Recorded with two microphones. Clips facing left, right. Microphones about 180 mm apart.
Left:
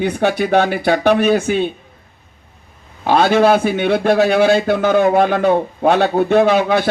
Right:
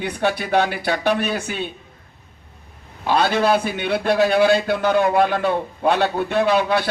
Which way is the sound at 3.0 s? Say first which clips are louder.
Left 6 dB; 50° left (ahead or behind).